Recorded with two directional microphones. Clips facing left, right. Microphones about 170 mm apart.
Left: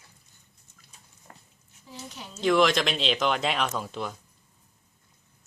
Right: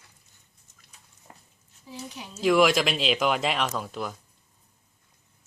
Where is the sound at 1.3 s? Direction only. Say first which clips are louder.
Even; 15° right (ahead or behind).